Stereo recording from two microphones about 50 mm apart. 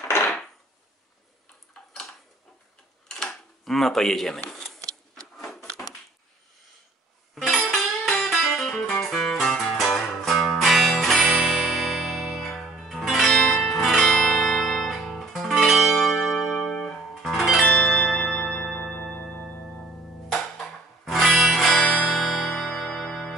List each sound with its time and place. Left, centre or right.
3.1 s a sound: centre
7.3 s music: centre
13.3 s music: centre
17.6 s zither: left
17.8 s tubular bells: centre
19.8 s music: centre
21.0 s music: centre